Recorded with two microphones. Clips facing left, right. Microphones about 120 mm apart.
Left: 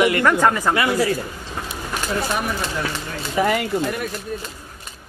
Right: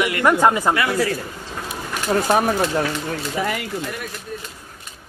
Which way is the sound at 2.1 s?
50° right (ahead or behind).